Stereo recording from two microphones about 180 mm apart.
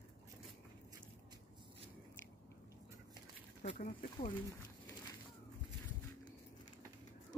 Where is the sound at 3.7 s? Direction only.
45° left (ahead or behind).